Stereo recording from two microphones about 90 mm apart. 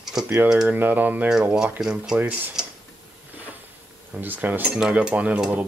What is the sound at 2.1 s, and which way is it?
Speech, 20° right (ahead or behind).